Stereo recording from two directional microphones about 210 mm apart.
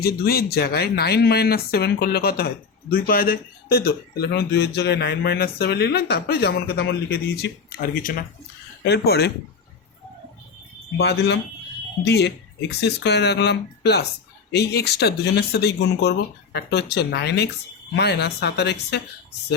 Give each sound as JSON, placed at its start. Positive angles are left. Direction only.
{"t": 0.0, "sound": "a man's voice", "side_deg": 50}
{"t": 10.9, "sound": "a man's voice", "side_deg": 55}